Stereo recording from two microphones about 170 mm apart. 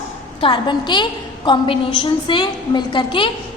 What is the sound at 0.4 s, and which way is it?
A woman's voice, 30° left (ahead or behind).